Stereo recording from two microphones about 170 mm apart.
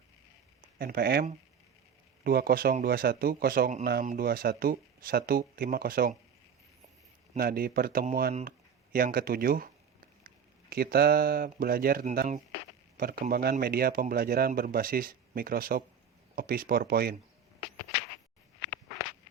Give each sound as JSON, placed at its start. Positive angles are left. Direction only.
{"t": 0.8, "sound": "a man's voice", "side_deg": -65}
{"t": 7.3, "sound": "a man's voice", "side_deg": -60}